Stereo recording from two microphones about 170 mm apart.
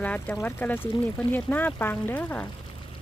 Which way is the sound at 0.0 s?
10° left (ahead or behind).